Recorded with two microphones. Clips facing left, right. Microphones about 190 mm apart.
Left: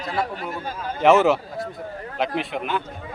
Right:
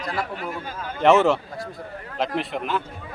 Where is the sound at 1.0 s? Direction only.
Centre (ahead or behind).